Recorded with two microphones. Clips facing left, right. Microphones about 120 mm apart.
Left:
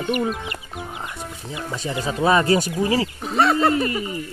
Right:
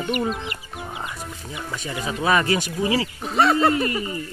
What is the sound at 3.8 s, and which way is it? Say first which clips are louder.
Speech: left 1 dB; 20° left (ahead or behind).